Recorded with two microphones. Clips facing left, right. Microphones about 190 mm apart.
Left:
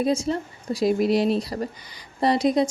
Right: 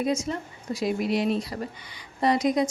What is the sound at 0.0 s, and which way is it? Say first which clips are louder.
A woman's voice: left 4 dB; 30° left (ahead or behind).